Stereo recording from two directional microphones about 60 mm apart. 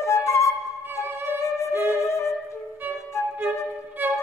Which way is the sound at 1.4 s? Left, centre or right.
Left.